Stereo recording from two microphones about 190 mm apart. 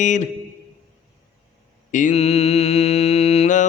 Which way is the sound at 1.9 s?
35° left (ahead or behind).